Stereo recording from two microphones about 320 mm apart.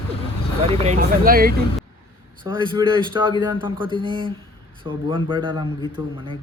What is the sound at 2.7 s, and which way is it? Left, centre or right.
Speech, centre.